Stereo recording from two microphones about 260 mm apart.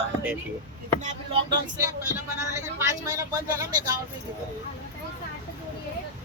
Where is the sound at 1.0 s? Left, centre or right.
Right.